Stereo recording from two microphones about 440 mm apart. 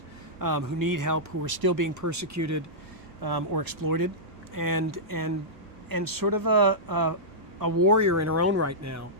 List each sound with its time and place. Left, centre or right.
0.3 s speech: right
3.2 s speech: right